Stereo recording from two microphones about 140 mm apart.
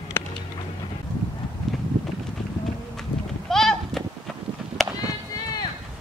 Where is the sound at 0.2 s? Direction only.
15° left (ahead or behind).